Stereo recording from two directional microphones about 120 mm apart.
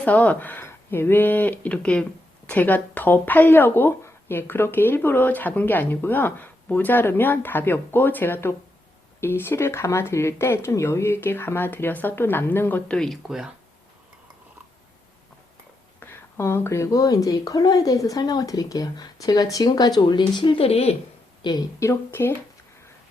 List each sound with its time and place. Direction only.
0.0 s speech: 15° left (ahead or behind)
13.2 s speech: 5° right (ahead or behind)
16.0 s a woman's voice: 20° left (ahead or behind); by 20.9 s 55° left (ahead or behind)
21.4 s a woman's voice: 40° left (ahead or behind)
21.8 s speech: 20° left (ahead or behind)